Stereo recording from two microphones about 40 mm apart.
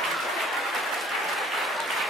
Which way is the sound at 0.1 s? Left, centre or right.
Centre.